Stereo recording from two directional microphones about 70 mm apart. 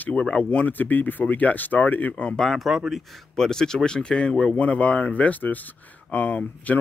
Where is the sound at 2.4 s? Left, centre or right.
Centre; by 6.8 s left.